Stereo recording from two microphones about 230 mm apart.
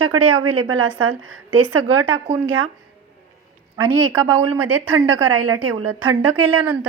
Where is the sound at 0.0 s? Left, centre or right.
Right.